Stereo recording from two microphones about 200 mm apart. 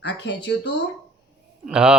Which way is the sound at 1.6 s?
5° right (ahead or behind).